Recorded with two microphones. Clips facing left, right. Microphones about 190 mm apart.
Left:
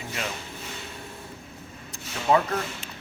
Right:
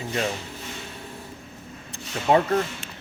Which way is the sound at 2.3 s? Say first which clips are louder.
Right 2 dB; 25° right (ahead or behind).